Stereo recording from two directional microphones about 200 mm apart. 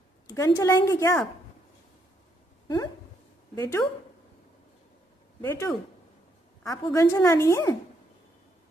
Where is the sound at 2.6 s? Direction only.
20° left (ahead or behind).